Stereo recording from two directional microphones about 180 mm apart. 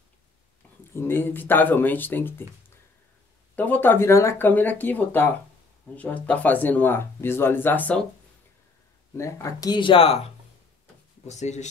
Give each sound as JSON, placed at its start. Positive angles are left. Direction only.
{"t": 0.9, "sound": "speech", "side_deg": 10}
{"t": 3.5, "sound": "speech", "side_deg": 10}
{"t": 9.1, "sound": "speech", "side_deg": 15}